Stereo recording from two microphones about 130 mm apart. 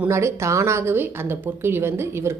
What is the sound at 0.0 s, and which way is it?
Speech, 20° right (ahead or behind).